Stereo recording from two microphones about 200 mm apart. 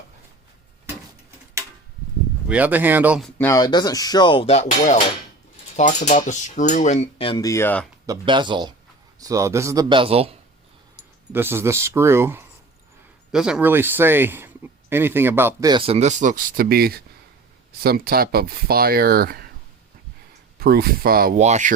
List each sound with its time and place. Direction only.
2.5 s a man's voice: 10° right (ahead or behind)
3.3 s speech: 15° left (ahead or behind)
8.0 s a man's voice: 20° right (ahead or behind)
11.3 s a man's voice: 10° right (ahead or behind)
15.7 s speech: 30° right (ahead or behind); by 19.5 s 50° right (ahead or behind)
20.6 s speech: 50° right (ahead or behind)
21.3 s speech: 35° right (ahead or behind)